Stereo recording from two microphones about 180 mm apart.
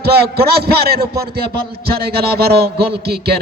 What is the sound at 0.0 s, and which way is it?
A man's voice, 60° right (ahead or behind).